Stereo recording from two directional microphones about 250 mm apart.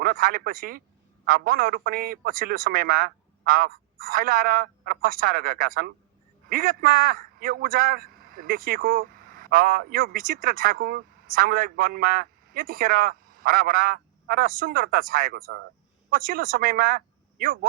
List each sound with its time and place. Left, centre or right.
0.0 s a man's voice: right